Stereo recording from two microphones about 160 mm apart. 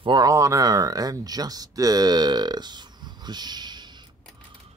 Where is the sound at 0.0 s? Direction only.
25° right (ahead or behind).